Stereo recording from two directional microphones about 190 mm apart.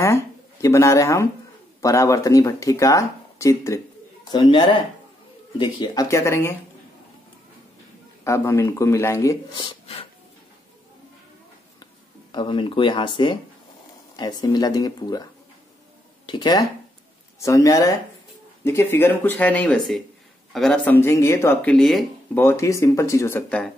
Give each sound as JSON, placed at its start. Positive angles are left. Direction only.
{"t": 0.0, "sound": "speech", "side_deg": 15}
{"t": 8.2, "sound": "speech", "side_deg": 15}
{"t": 12.3, "sound": "speech", "side_deg": 25}
{"t": 16.3, "sound": "speech", "side_deg": 25}
{"t": 22.4, "sound": "speech", "side_deg": 15}